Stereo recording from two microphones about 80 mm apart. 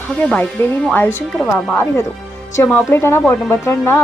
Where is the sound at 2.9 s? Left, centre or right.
Left.